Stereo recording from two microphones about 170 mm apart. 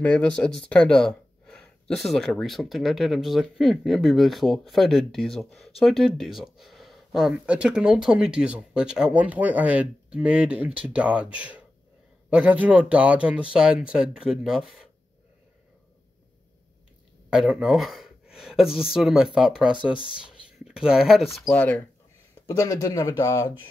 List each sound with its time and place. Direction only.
0.0 s speech: 5° left (ahead or behind)
17.3 s speech: 5° right (ahead or behind)
22.6 s speech: 20° left (ahead or behind)